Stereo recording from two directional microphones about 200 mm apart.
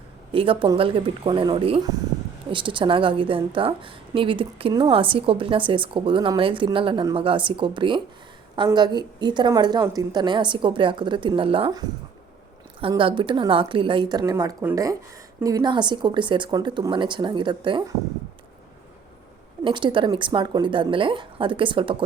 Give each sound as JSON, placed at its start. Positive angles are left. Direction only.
{"t": 0.3, "sound": "a woman's voice", "side_deg": -25}
{"t": 19.6, "sound": "a woman's voice", "side_deg": -25}